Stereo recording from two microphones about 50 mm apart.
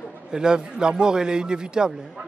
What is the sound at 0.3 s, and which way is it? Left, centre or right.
A man's voice, centre.